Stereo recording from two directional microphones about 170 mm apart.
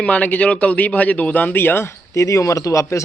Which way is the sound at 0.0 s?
10° left (ahead or behind).